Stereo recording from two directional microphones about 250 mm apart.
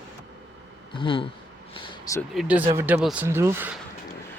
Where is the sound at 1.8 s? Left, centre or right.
Centre.